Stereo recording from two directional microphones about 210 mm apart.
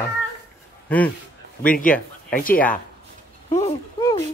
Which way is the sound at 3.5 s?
30° left (ahead or behind).